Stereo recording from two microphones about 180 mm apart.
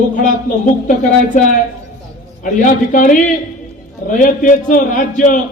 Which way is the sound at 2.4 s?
50° left (ahead or behind).